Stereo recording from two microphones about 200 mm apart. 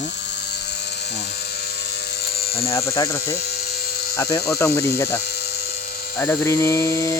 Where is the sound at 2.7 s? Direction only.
15° left (ahead or behind).